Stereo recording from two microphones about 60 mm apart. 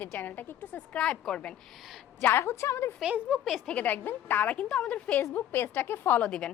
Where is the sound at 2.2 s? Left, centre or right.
Left.